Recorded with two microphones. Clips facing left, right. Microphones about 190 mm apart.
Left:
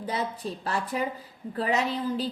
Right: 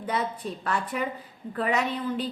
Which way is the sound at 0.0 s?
30° left (ahead or behind).